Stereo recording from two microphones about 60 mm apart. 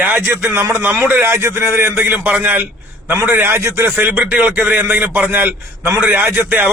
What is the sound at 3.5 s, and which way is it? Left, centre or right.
Speech, right.